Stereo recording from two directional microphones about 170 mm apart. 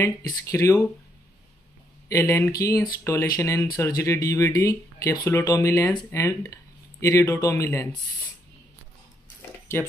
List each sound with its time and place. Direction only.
0.0 s speech: 20° left (ahead or behind)
2.0 s speech: 15° left (ahead or behind)
9.7 s speech: 15° left (ahead or behind)